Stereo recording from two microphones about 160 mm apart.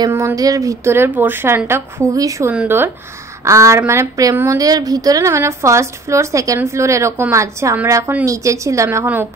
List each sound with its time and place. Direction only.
0.0 s a woman's voice: 15° right (ahead or behind)